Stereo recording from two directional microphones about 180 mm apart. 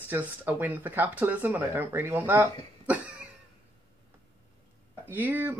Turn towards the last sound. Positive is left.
turn(degrees=-10)  # may be behind; listen again after turning